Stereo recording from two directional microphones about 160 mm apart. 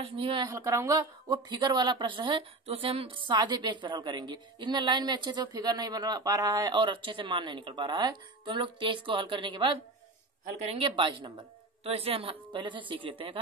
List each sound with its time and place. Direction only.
0.0 s a woman's voice: 35° right (ahead or behind)
0.5 s a woman's voice: 20° right (ahead or behind)
10.4 s a woman's voice: 40° right (ahead or behind)